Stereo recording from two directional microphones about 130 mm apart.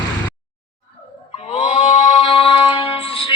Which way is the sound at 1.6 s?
40° left (ahead or behind).